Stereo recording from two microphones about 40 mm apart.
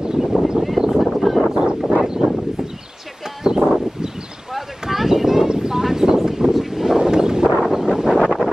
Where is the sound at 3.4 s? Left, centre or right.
Centre.